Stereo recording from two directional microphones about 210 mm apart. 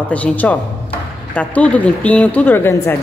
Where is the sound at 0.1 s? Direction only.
5° left (ahead or behind).